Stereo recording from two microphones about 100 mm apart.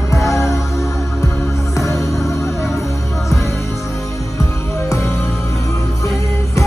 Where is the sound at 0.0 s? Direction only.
30° left (ahead or behind).